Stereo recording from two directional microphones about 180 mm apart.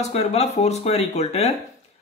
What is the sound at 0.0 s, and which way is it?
A man's voice, 35° left (ahead or behind).